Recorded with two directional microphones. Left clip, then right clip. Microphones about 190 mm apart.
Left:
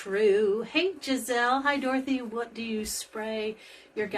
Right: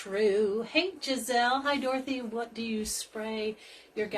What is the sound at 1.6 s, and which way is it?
Speech, 25° left (ahead or behind).